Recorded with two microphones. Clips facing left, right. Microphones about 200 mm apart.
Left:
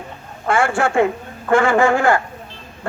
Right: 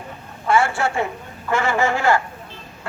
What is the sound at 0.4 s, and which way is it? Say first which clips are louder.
A man's voice: left 1 dB; 50° left (ahead or behind).